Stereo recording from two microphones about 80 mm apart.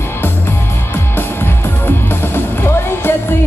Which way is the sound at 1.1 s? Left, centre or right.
Left.